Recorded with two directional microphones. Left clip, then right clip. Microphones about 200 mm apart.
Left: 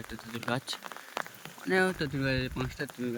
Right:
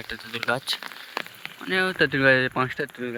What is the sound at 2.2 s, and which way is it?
Speech, 5° left (ahead or behind).